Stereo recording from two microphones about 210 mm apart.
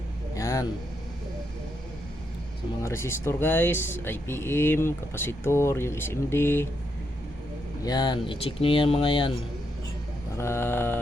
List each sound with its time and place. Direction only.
0.3 s vehicle: 15° left (ahead or behind)
2.8 s speech: 15° left (ahead or behind)
7.9 s speech: 20° left (ahead or behind)
10.3 s speech: 10° left (ahead or behind)